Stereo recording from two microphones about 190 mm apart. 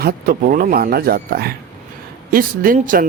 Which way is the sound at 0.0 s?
50° right (ahead or behind).